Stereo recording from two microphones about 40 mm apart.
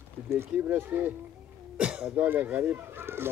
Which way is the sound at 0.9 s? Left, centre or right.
Right.